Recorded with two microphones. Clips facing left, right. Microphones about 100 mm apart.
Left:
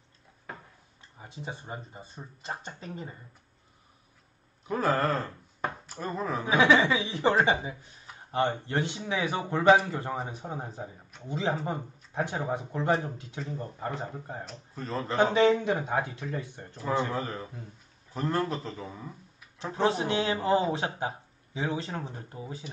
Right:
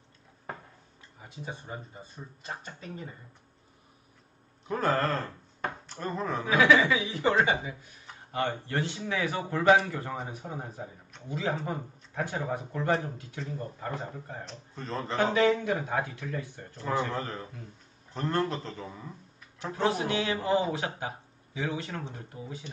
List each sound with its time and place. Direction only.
1.2 s speech: 25° left (ahead or behind)
4.6 s speech: centre (ahead or behind)
6.4 s speech: 25° left (ahead or behind)
14.4 s a man's voice: 5° left (ahead or behind)
15.3 s speech: 25° left (ahead or behind)
17.1 s a man's voice: 5° left (ahead or behind)
19.7 s speech: 25° left (ahead or behind)